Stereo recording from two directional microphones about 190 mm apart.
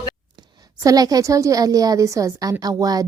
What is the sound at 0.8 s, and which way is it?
A woman's voice, 20° right (ahead or behind).